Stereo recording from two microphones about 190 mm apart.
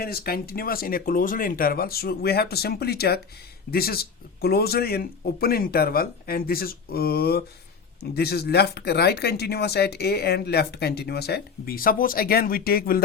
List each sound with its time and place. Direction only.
0.0 s speech: 50° left (ahead or behind)